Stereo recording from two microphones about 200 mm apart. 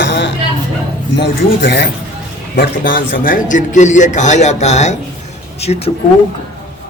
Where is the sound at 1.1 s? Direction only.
60° left (ahead or behind).